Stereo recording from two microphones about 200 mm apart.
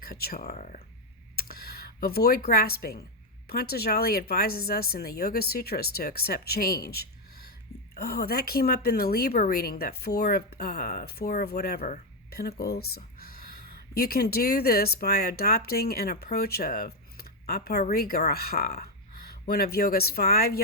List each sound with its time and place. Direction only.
0.0 s a woman's voice: 50° left (ahead or behind)
0.5 s a woman's voice: 40° left (ahead or behind)